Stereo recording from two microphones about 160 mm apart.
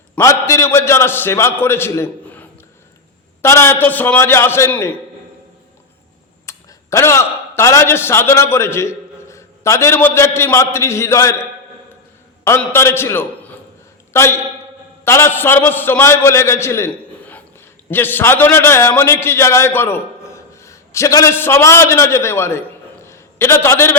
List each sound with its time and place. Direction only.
0.2 s a man's voice: 20° left (ahead or behind)
6.4 s a man's voice: 20° left (ahead or behind)
12.5 s a man's voice: 15° left (ahead or behind)
23.0 s a sound: 15° left (ahead or behind)